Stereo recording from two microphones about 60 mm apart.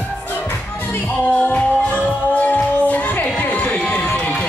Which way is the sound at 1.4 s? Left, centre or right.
Left.